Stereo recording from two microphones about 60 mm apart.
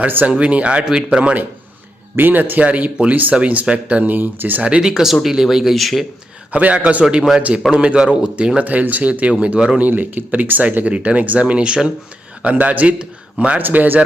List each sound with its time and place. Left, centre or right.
0.0 s a man's voice: right
2.1 s speech: right
4.8 s speech: centre
6.5 s a man's voice: right